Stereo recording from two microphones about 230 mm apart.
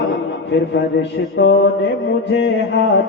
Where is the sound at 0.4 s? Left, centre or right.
Left.